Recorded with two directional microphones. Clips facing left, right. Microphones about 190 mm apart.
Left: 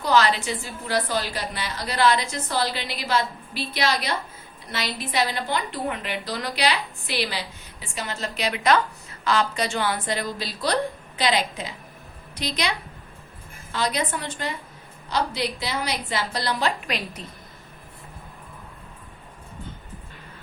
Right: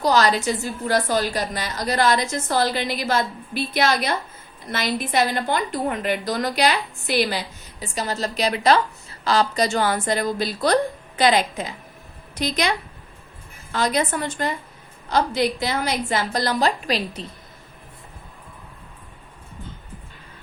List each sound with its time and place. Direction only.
0.0 s a woman's voice: 40° right (ahead or behind)
13.7 s a woman's voice: 45° right (ahead or behind)